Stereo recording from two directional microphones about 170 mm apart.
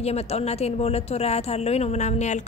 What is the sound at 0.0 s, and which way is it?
Speech, 40° left (ahead or behind).